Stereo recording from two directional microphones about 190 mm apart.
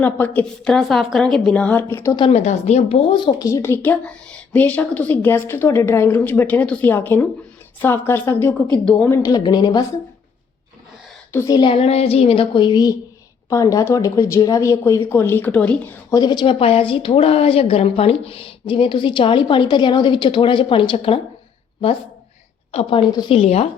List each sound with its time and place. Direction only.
0.0 s a woman's voice: 10° left (ahead or behind)
2.1 s a woman's voice: 30° left (ahead or behind)
11.3 s speech: 15° left (ahead or behind)
22.7 s speech: 30° left (ahead or behind)